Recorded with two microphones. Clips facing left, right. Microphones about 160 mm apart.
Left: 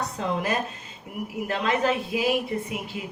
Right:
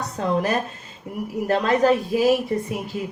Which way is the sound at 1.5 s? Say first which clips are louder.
Right 7 dB; 40° right (ahead or behind).